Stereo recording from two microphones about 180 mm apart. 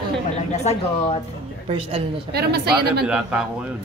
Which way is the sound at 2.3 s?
60° right (ahead or behind).